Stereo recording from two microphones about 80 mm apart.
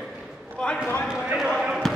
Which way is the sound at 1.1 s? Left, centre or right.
Centre.